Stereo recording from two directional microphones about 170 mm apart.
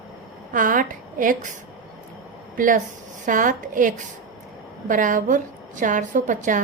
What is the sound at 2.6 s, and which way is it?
A woman's voice, 50° right (ahead or behind).